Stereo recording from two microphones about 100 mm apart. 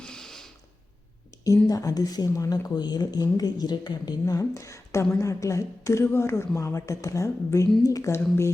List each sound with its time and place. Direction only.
0.0 s mechanisms: 5° left (ahead or behind)
1.6 s speech: 35° left (ahead or behind)